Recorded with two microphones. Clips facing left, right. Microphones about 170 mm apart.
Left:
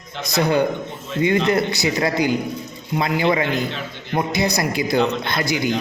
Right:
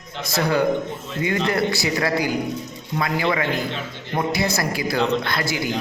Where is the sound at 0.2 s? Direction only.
20° left (ahead or behind).